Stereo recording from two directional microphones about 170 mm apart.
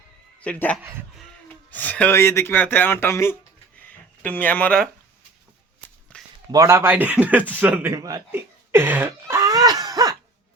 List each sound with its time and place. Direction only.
0.4 s speech: 5° left (ahead or behind)
0.8 s a man's voice: 15° right (ahead or behind)
1.7 s speech: 10° left (ahead or behind)
6.1 s a sound: 5° left (ahead or behind)
6.5 s a man's voice: 20° right (ahead or behind)